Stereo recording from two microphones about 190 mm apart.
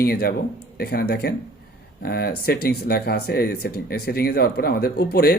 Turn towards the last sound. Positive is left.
turn(degrees=55)  # may be behind; listen again after turning